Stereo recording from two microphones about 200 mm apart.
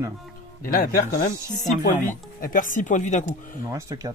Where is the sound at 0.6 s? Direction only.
45° left (ahead or behind).